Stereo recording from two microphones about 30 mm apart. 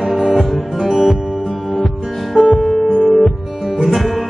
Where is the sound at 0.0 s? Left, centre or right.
Centre.